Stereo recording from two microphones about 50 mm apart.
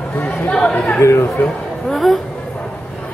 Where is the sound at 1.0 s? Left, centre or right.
Left.